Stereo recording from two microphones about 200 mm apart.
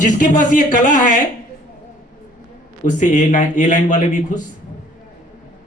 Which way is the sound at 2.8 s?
40° left (ahead or behind).